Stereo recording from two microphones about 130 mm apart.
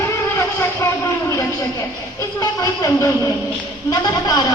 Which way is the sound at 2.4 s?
25° left (ahead or behind).